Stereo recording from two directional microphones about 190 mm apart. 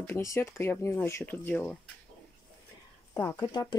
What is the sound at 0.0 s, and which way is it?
Speech, 15° left (ahead or behind).